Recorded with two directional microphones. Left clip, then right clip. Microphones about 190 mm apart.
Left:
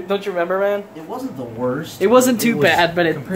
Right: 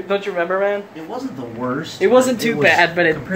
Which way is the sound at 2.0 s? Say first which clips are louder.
Even; 30° left (ahead or behind).